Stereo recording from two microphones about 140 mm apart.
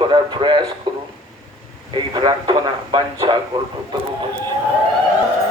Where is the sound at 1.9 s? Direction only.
35° right (ahead or behind).